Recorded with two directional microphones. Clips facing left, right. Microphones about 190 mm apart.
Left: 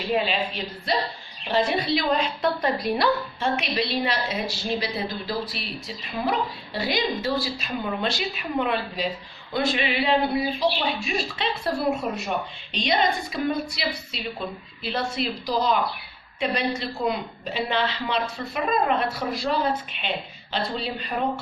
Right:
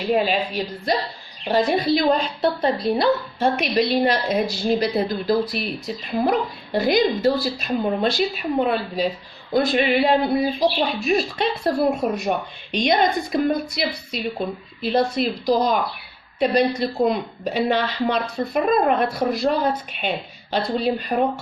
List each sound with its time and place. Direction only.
0.1 s a woman's voice: 45° right (ahead or behind); by 3.1 s 25° right (ahead or behind)
3.6 s a woman's voice: 45° right (ahead or behind)